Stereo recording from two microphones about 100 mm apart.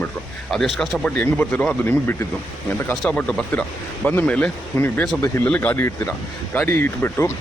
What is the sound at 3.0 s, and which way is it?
Speech, 15° left (ahead or behind).